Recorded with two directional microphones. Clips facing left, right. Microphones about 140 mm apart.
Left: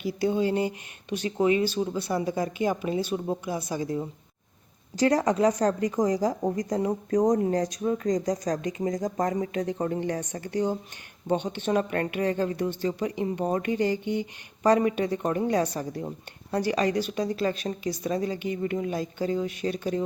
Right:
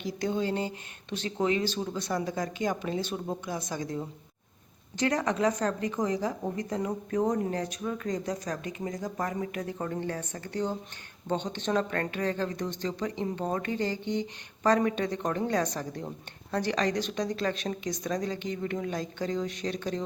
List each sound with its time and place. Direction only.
0.0 s speech: 10° left (ahead or behind)
4.9 s speech: 35° left (ahead or behind)
9.2 s speech: 25° left (ahead or behind); by 20.0 s 10° left (ahead or behind)